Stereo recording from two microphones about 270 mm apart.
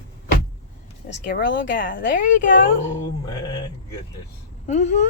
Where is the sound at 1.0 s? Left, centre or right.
Left.